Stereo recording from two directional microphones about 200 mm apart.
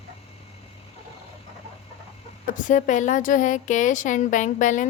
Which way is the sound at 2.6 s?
40° left (ahead or behind).